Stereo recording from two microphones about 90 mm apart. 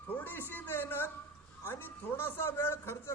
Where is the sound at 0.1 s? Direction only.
20° left (ahead or behind).